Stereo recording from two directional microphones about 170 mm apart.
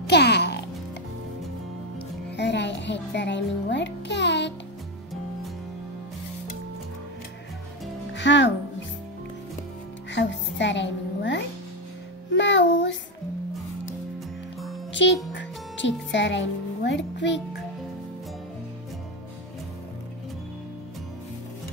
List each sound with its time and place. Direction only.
0.0 s music: 80° left
2.3 s music: 90° left
8.1 s music: 90° left
10.1 s music: 90° left
14.9 s music: 90° left